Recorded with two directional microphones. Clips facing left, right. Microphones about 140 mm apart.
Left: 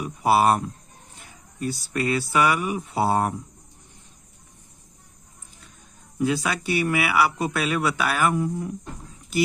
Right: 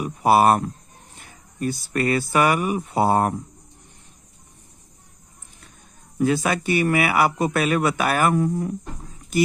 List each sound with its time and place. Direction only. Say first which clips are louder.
0.0 s speech: right 3 dB; 50° right (ahead or behind)
6.1 s speech: right 3 dB; 50° right (ahead or behind)